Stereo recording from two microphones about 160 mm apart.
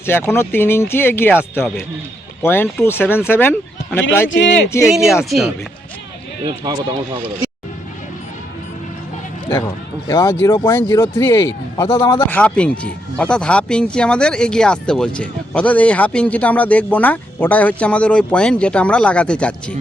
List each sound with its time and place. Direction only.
0.0 s speech: 15° left (ahead or behind)
4.9 s speech: centre (ahead or behind)
6.4 s speech: 30° right (ahead or behind)
9.6 s a man's voice: 20° left (ahead or behind)